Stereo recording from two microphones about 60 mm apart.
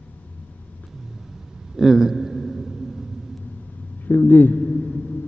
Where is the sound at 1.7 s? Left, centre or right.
Centre.